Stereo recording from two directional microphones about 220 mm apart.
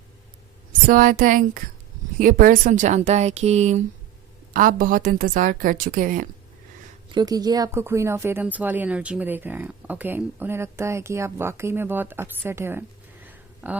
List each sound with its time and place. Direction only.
0.9 s a woman's voice: 40° right (ahead or behind)
7.1 s speech: 20° right (ahead or behind)
13.2 s a sound: 5° right (ahead or behind)